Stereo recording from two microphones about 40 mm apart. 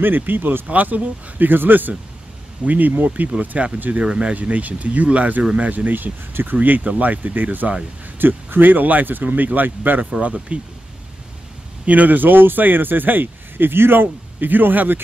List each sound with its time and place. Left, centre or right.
0.0 s speech: right
0.7 s a man's voice: right
1.5 s a man's voice: right
3.3 s speech: right
4.4 s a man's voice: right
6.8 s speech: right
8.2 s a man's voice: right
10.2 s speech: right
11.8 s a man's voice: right
14.4 s a man's voice: right